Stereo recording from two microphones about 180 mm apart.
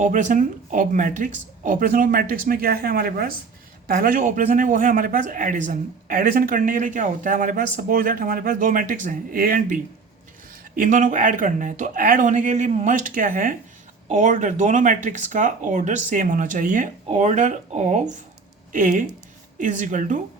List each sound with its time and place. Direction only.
0.0 s a man's voice: 45° right (ahead or behind)
10.8 s a man's voice: 45° right (ahead or behind)